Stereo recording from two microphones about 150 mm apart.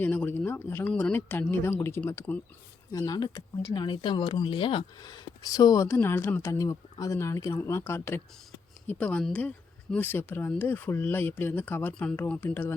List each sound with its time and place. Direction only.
0.0 s speech: 10° left (ahead or behind)